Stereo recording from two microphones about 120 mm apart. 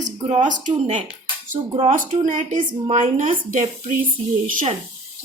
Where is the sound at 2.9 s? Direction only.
75° right (ahead or behind).